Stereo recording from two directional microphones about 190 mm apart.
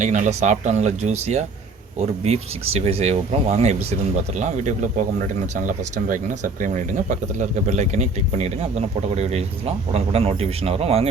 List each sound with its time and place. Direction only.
0.0 s speech: 40° right (ahead or behind)